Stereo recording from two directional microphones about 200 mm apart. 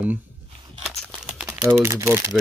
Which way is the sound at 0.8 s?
Centre (ahead or behind).